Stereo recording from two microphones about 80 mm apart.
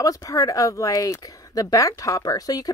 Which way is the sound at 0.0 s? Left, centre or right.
Left.